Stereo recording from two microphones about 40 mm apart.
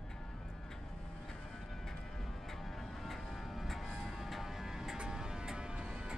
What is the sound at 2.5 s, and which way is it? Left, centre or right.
Vehicle, centre.